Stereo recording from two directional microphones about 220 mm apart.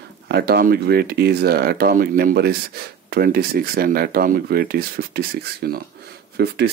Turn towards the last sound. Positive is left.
turn(degrees=-50)  # may be behind; listen again after turning